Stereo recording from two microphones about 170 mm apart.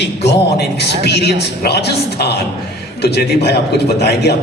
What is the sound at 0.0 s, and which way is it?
A man's voice, 85° left.